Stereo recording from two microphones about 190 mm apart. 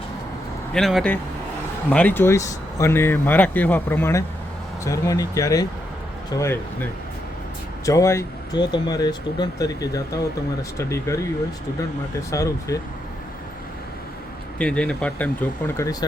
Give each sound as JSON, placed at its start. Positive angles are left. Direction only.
{"t": 0.7, "sound": "speech", "side_deg": 0}
{"t": 7.9, "sound": "speech", "side_deg": 15}
{"t": 12.3, "sound": "speech", "side_deg": 15}
{"t": 14.6, "sound": "speech", "side_deg": 5}